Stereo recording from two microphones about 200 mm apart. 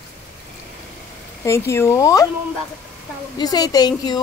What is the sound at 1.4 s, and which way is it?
Speech, 15° left (ahead or behind).